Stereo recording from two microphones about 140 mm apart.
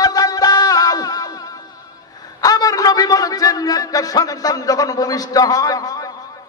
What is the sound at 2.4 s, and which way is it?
A man's voice, 25° left (ahead or behind).